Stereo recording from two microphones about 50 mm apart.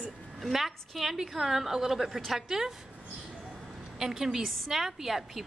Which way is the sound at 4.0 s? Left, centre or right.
Centre.